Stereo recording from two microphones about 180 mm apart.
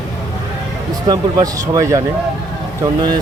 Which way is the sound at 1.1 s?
20° right (ahead or behind).